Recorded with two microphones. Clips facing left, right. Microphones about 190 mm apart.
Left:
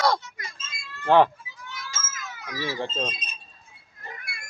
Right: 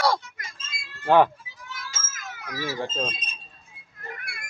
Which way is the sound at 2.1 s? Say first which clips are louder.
Right 4 dB; 50° right (ahead or behind).